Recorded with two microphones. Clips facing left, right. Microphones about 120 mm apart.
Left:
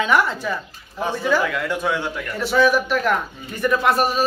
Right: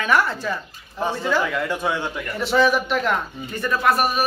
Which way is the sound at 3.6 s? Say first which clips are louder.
Left 2 dB; 20° left (ahead or behind).